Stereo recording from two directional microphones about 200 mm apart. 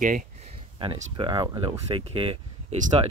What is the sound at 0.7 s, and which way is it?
Speech, 25° right (ahead or behind).